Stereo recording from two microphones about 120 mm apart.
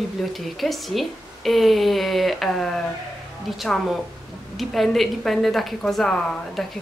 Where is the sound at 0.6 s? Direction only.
Centre (ahead or behind).